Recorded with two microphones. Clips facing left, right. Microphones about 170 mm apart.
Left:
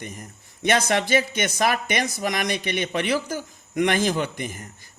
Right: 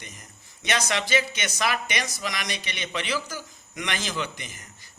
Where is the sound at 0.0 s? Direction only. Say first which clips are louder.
Left 9 dB; 50° left (ahead or behind).